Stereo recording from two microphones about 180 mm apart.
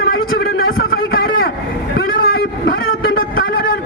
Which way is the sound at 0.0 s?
55° left (ahead or behind).